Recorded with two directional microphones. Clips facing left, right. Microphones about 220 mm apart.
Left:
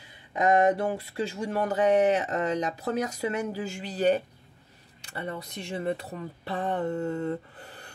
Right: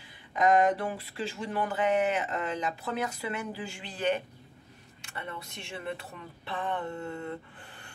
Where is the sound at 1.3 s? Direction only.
40° left (ahead or behind).